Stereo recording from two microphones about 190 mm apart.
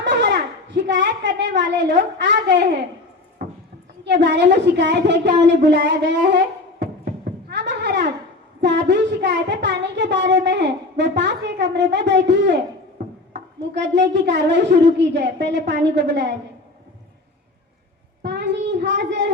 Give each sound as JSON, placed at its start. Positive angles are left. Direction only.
{"t": 0.0, "sound": "a woman's voice", "side_deg": -65}
{"t": 4.0, "sound": "a child's voice", "side_deg": -65}
{"t": 7.5, "sound": "a sound", "side_deg": -65}
{"t": 8.6, "sound": "a child's voice", "side_deg": -65}
{"t": 13.7, "sound": "a child's voice", "side_deg": -65}
{"t": 18.2, "sound": "a sound", "side_deg": -65}